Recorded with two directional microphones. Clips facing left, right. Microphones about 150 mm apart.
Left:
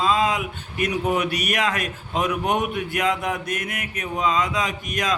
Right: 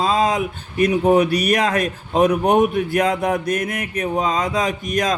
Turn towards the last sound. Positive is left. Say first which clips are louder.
# right 5 dB
turn(degrees=-40)  # may be behind; listen again after turning